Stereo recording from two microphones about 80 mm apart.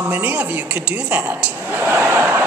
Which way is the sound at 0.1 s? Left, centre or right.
Centre.